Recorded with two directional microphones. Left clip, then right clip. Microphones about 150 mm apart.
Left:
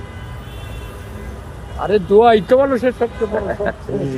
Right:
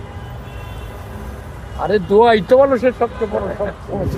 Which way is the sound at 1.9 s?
15° left (ahead or behind).